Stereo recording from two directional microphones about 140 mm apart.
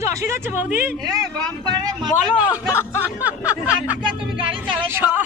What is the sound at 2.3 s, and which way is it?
Speech, 10° right (ahead or behind).